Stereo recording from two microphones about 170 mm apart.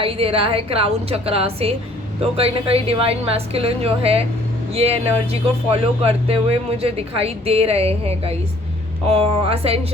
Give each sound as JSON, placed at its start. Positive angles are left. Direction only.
{"t": 0.0, "sound": "speech", "side_deg": -35}